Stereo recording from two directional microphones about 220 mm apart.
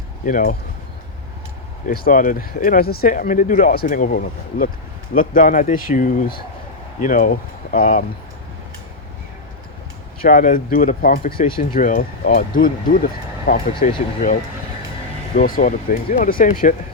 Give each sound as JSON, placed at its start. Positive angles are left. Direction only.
{"t": 0.3, "sound": "speech", "side_deg": 35}
{"t": 1.9, "sound": "speech", "side_deg": 40}
{"t": 10.2, "sound": "speech", "side_deg": 35}
{"t": 15.4, "sound": "speech", "side_deg": 40}